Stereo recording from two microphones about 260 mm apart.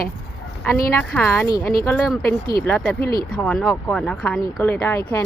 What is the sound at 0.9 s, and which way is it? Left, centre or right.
Speech, centre.